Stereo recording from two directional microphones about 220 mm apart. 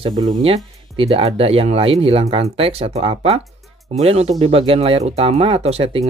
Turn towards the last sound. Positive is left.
turn(degrees=-25)  # may be behind; listen again after turning